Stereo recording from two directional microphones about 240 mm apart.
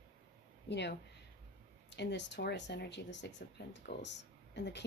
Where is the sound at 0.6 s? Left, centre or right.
Left.